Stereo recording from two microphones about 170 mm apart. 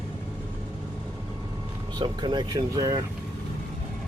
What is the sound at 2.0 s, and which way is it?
Speech, 25° right (ahead or behind).